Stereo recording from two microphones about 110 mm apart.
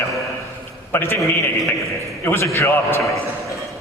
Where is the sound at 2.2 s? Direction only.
25° left (ahead or behind).